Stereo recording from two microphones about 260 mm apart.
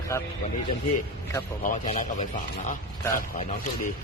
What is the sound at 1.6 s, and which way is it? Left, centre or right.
Speech, left.